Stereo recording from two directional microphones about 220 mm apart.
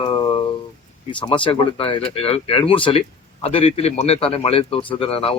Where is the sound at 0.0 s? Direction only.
25° left (ahead or behind).